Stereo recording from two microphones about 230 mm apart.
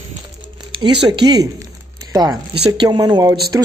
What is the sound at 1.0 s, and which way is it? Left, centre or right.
Speech, centre.